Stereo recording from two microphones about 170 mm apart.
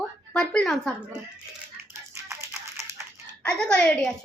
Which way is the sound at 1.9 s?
15° right (ahead or behind).